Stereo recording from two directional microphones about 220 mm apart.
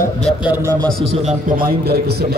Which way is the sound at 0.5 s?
15° right (ahead or behind).